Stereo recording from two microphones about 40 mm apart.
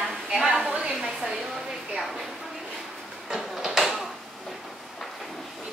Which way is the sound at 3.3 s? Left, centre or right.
Centre.